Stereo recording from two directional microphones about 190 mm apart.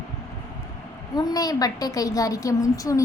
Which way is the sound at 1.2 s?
20° left (ahead or behind).